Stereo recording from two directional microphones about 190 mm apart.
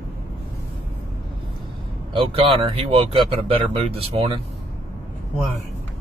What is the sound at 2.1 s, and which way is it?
Speech, 25° right (ahead or behind).